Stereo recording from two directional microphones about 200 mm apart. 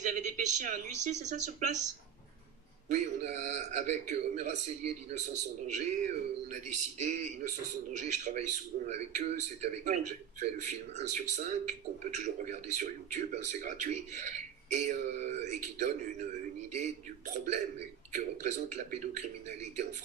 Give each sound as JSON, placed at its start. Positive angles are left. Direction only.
{"t": 0.0, "sound": "a man's voice", "side_deg": -35}
{"t": 2.9, "sound": "a man's voice", "side_deg": -35}